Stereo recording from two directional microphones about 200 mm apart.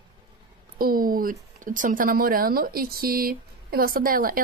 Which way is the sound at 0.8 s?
45° right (ahead or behind).